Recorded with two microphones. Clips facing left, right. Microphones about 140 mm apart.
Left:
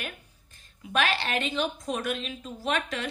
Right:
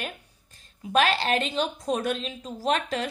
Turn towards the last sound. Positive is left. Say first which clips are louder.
# right 4 dB
turn(degrees=-35)  # may be behind; listen again after turning